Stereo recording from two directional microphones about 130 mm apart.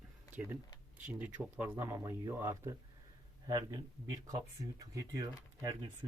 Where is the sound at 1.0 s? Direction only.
10° right (ahead or behind).